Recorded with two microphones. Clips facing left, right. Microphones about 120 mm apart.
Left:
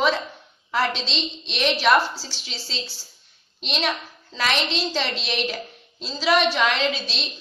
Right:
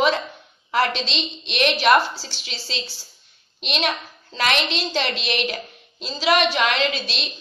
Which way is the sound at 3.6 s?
65° right (ahead or behind).